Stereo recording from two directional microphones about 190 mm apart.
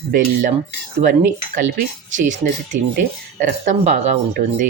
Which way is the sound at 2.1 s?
40° right (ahead or behind).